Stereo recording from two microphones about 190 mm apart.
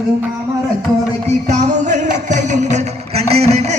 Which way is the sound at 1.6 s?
40° right (ahead or behind).